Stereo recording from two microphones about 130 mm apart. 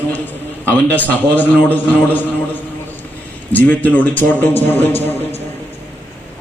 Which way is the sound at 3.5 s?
15° left (ahead or behind).